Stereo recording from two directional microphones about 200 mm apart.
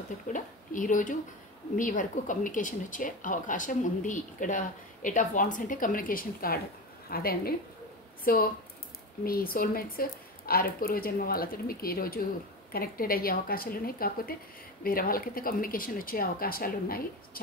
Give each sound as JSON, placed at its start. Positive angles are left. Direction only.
{"t": 0.3, "sound": "speech", "side_deg": 40}